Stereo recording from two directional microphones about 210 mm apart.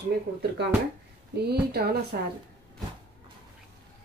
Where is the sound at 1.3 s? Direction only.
50° right (ahead or behind).